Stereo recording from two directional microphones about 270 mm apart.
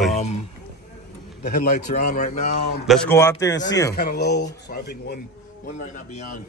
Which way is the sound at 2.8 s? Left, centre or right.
Centre.